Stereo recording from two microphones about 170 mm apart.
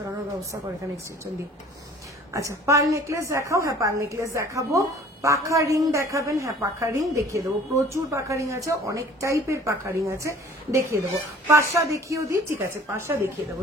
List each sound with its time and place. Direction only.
0.4 s a woman's voice: 15° right (ahead or behind)
2.3 s a woman's voice: 20° right (ahead or behind)